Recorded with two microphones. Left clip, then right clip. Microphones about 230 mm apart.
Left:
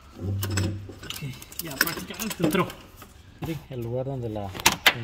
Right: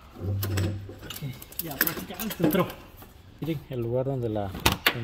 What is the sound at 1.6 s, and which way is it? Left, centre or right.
Speech, centre.